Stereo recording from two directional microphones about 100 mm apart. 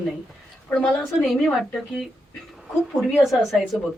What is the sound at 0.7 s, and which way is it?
A man's voice, 5° left (ahead or behind).